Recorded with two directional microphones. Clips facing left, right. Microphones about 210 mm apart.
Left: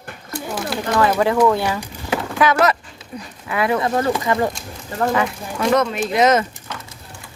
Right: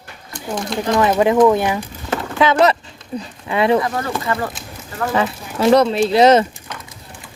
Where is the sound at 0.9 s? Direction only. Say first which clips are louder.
Right 3 dB; 20° right (ahead or behind).